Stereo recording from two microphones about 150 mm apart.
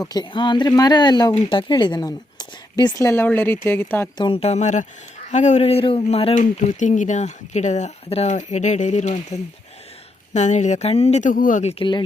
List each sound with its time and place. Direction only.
0.0 s speech: 25° left (ahead or behind)
4.2 s speech: 40° left (ahead or behind)
6.3 s speech: 55° left (ahead or behind)
11.7 s speech: 35° left (ahead or behind)